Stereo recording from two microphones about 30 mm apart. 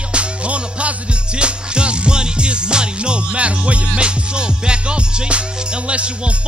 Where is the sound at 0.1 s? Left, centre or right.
Right.